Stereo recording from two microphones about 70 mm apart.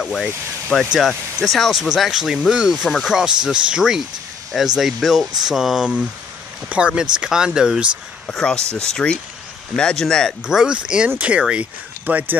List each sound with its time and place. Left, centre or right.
0.0 s speech: centre
8.3 s speech: centre
10.4 s speech: centre